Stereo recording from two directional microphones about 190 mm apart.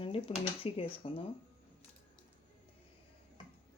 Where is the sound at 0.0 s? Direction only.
30° left (ahead or behind).